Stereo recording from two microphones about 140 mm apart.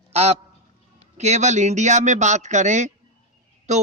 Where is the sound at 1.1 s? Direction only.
55° right (ahead or behind).